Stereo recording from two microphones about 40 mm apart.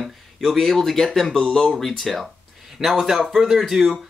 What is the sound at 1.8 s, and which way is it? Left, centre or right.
Speech, centre.